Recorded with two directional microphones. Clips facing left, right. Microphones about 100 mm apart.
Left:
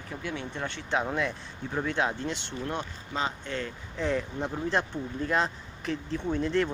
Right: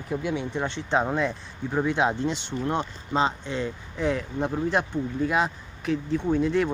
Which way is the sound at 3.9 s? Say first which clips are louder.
Right 3 dB; 5° right (ahead or behind).